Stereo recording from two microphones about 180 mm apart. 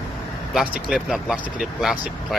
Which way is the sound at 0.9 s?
5° right (ahead or behind).